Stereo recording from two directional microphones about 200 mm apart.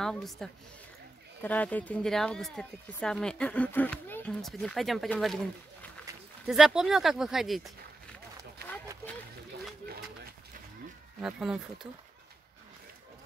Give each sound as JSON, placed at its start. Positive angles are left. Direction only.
{"t": 0.0, "sound": "a woman's voice", "side_deg": 0}
{"t": 6.4, "sound": "speech", "side_deg": -5}
{"t": 11.1, "sound": "speech", "side_deg": -5}